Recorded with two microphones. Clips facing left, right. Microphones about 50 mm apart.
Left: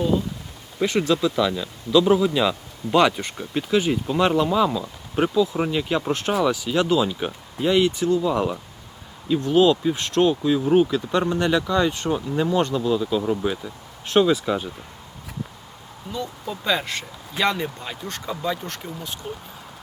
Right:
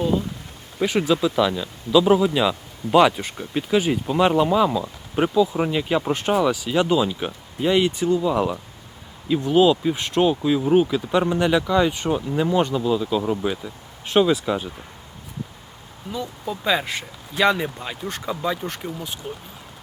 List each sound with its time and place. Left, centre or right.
0.8 s speech: centre
16.1 s speech: centre